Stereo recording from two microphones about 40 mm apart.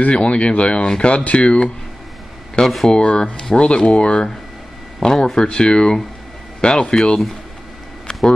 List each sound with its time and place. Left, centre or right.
0.1 s speech: left
5.0 s speech: centre